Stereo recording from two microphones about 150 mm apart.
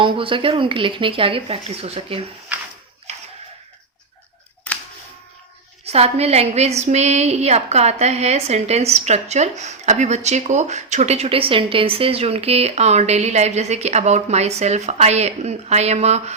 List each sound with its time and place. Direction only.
0.0 s speech: 35° right (ahead or behind)
5.8 s a woman's voice: 45° right (ahead or behind)